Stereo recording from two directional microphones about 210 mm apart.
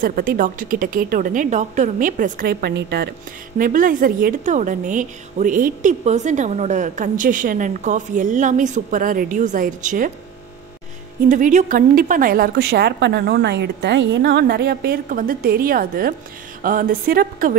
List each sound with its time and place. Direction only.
0.0 s a woman's voice: 45° right (ahead or behind)
11.2 s a woman's voice: 40° right (ahead or behind)